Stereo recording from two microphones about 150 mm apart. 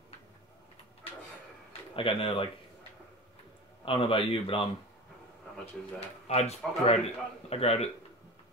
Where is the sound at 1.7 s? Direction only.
35° left (ahead or behind).